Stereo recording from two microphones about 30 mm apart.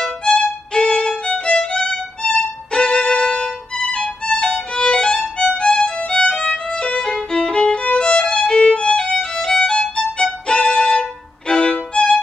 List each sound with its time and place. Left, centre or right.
0.2 s violin: left
5.9 s music: left
8.0 s violin: left
9.1 s violin: centre; by 12.2 s left